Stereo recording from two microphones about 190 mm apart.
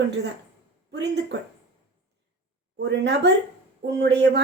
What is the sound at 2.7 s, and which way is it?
A woman's voice, 65° right (ahead or behind).